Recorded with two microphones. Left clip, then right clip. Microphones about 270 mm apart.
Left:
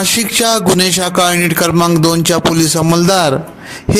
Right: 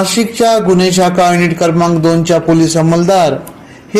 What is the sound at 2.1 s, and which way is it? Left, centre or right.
Speech, left.